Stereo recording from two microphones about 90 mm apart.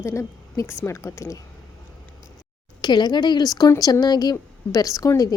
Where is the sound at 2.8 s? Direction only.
55° left (ahead or behind).